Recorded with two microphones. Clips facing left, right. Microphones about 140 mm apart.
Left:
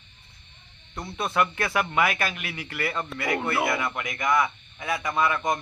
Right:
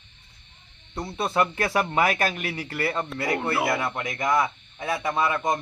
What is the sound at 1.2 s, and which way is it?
A man's voice, 30° right (ahead or behind).